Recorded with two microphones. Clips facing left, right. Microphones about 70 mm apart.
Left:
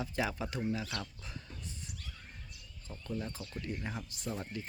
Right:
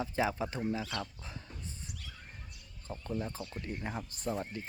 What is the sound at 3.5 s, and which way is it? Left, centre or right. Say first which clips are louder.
Speech: right 1 dB; right.